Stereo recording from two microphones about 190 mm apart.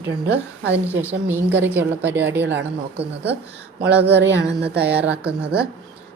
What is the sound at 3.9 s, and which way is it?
Speech, 65° right (ahead or behind).